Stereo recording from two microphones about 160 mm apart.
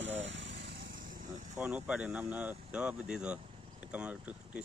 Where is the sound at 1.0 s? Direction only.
55° right (ahead or behind).